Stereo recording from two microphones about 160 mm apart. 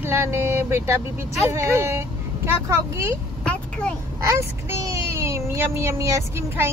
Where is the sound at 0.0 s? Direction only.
15° right (ahead or behind).